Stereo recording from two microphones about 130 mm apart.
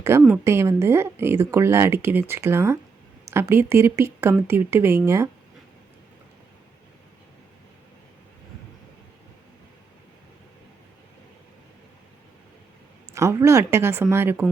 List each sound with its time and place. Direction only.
0.1 s speech: 20° right (ahead or behind)
13.1 s speech: 20° right (ahead or behind)